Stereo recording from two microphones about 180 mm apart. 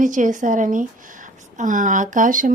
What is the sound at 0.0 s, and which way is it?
A woman's voice, 45° right (ahead or behind).